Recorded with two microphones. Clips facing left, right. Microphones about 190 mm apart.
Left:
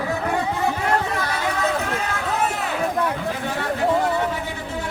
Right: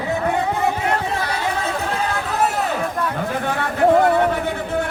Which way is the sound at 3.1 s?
55° right (ahead or behind).